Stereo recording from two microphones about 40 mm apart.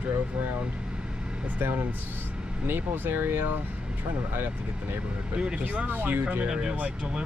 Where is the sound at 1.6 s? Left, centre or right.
Right.